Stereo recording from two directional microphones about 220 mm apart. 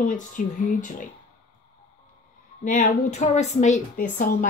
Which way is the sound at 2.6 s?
35° left (ahead or behind).